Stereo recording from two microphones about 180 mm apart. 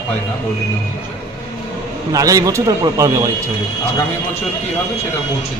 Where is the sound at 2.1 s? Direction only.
20° right (ahead or behind).